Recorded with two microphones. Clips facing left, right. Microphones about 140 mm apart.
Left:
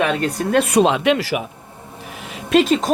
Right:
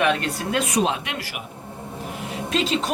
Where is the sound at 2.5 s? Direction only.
55° left (ahead or behind).